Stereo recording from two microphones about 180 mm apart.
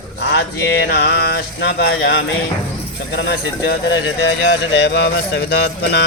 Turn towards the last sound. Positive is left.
turn(degrees=65)  # may be behind; listen again after turning